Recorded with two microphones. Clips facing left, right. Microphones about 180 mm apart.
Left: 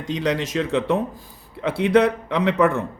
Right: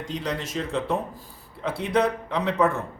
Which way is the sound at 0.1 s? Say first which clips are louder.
Left 8 dB; 80° left.